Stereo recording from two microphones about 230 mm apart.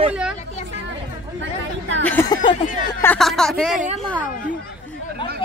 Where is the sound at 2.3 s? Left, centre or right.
Centre.